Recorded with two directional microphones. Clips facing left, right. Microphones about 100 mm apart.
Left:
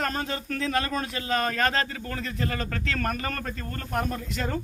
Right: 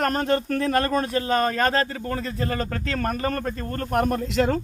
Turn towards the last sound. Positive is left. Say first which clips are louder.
# right 8 dB
turn(degrees=-90)